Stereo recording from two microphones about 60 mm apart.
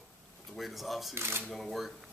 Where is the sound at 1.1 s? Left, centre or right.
Right.